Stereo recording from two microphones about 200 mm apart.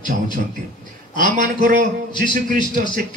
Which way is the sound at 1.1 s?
40° right (ahead or behind).